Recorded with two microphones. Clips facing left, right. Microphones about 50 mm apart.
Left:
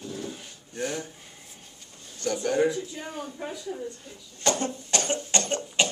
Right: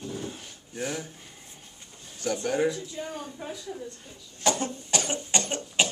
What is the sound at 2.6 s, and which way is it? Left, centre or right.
Speech, centre.